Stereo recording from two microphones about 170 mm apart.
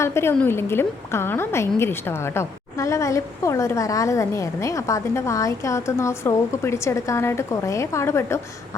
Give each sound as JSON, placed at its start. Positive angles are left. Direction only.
{"t": 0.0, "sound": "a woman's voice", "side_deg": 15}